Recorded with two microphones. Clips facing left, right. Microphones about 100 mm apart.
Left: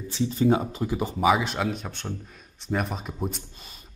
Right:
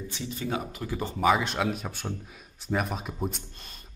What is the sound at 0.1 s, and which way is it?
Speech, 30° left (ahead or behind).